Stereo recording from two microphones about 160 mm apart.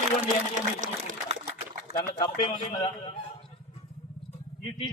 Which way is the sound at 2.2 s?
30° left (ahead or behind).